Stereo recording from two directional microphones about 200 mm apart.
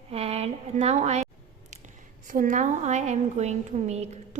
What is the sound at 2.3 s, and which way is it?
A woman's voice, 40° right (ahead or behind).